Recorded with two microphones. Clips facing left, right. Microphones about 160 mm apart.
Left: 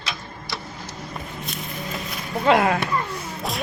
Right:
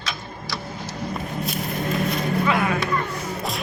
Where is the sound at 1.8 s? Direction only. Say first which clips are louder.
Right 10 dB; 55° right (ahead or behind).